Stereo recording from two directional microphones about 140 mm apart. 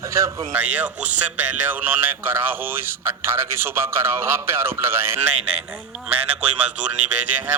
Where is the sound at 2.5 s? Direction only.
15° right (ahead or behind).